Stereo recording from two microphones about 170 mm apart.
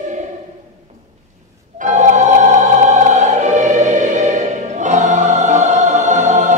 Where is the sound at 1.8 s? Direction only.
45° right (ahead or behind).